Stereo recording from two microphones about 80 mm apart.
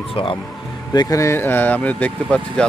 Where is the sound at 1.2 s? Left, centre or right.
Left.